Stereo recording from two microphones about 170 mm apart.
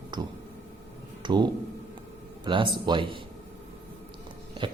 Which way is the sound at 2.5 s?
25° right (ahead or behind).